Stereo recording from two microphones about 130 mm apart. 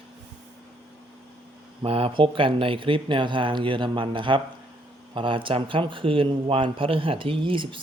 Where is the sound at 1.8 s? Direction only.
45° right (ahead or behind).